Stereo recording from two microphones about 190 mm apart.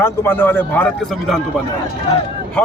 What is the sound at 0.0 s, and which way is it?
Speech, 10° left (ahead or behind).